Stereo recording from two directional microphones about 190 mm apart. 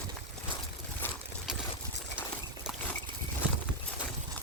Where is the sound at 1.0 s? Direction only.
10° left (ahead or behind).